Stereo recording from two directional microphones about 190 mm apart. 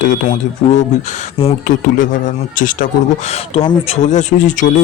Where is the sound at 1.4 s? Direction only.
45° left (ahead or behind).